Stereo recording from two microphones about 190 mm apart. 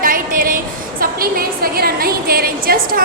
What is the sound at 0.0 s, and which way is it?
A woman's voice, 45° right (ahead or behind).